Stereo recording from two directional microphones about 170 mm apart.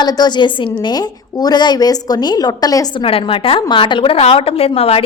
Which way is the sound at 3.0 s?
35° left (ahead or behind).